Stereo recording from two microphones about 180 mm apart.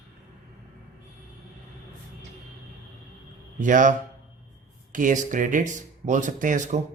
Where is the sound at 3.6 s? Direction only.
45° right (ahead or behind).